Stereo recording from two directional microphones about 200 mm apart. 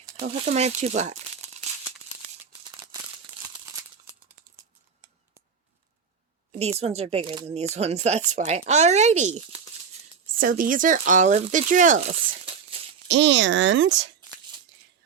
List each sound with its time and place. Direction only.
0.4 s speech: 30° right (ahead or behind)
6.6 s speech: 30° right (ahead or behind)
13.1 s speech: 65° right (ahead or behind)